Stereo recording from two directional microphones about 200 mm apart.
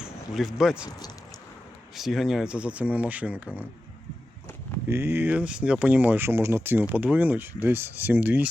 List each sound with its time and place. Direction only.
0.0 s speech: centre (ahead or behind)
0.9 s speech: 20° left (ahead or behind)
2.0 s speech: centre (ahead or behind)
4.9 s speech: 10° right (ahead or behind)